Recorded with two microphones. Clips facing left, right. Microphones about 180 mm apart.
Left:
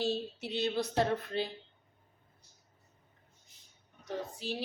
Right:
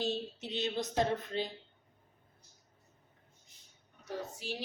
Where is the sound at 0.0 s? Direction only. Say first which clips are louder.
Left 2 dB; 20° right (ahead or behind).